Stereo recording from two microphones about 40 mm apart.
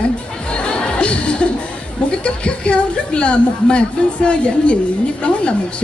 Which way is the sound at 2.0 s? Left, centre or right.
Left.